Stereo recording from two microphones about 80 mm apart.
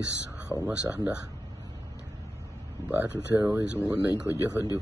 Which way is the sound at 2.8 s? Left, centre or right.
Centre.